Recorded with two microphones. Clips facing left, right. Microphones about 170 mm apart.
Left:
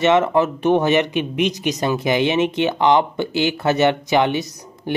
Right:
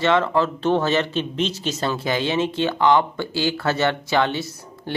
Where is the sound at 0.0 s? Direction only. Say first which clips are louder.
Left 3 dB; 20° left (ahead or behind).